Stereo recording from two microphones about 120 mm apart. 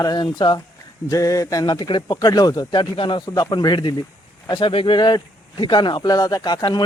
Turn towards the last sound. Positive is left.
turn(degrees=35)  # may be behind; listen again after turning